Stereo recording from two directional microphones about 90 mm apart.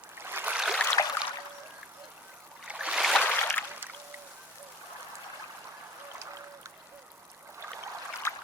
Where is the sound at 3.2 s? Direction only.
25° left (ahead or behind).